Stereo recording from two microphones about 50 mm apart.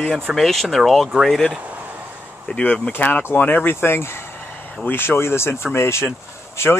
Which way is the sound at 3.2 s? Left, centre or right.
Left.